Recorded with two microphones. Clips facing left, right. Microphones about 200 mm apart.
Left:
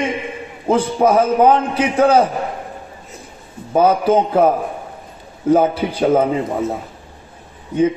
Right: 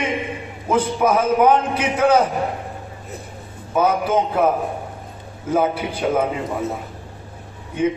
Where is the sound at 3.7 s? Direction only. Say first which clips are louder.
Left 5 dB; 30° left (ahead or behind).